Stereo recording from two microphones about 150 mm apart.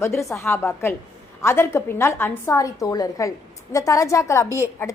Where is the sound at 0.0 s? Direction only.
20° left (ahead or behind).